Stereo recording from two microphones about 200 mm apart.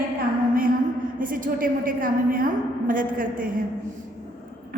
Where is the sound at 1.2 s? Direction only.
45° right (ahead or behind).